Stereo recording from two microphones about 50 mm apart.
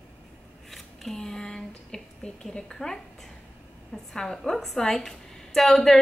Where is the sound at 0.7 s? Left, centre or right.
Centre.